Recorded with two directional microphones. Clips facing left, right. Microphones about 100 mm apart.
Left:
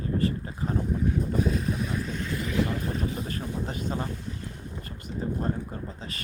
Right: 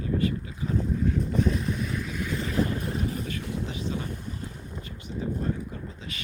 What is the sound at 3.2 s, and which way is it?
Speech, 40° left (ahead or behind).